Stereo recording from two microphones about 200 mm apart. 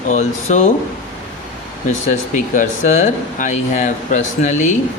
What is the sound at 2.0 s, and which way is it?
Speech, 40° left (ahead or behind).